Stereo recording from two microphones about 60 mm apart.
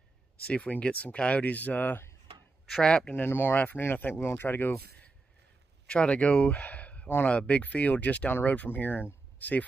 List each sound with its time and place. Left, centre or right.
0.5 s speech: left
2.8 s speech: centre
3.2 s speech: left
5.9 s speech: centre